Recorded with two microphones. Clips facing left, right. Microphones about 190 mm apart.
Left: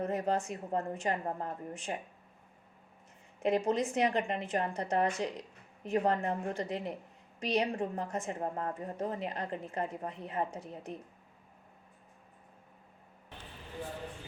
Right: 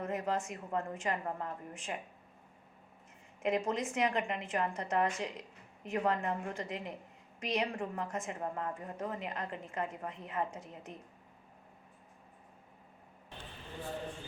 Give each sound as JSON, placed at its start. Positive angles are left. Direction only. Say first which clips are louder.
{"t": 0.0, "sound": "a woman's voice", "louder": "left 3 dB", "side_deg": 35}
{"t": 3.4, "sound": "a woman's voice", "louder": "left 4 dB", "side_deg": 35}